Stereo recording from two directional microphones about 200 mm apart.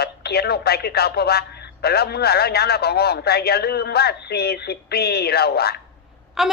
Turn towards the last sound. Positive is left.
turn(degrees=0)  # may be behind; listen again after turning